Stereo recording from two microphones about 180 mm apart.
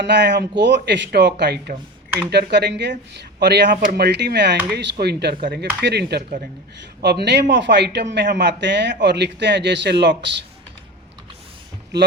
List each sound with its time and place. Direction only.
0.0 s speech: 70° right (ahead or behind)